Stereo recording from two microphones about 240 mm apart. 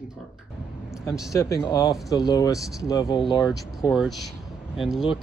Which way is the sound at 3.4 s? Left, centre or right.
Centre.